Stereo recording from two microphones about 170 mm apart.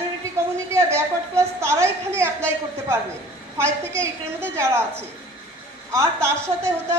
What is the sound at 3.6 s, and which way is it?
A woman's voice, 15° right (ahead or behind).